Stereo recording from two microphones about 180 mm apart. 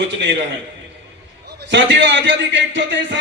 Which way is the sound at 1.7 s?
80° right.